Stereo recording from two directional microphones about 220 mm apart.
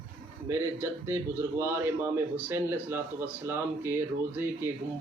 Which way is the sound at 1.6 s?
10° right (ahead or behind).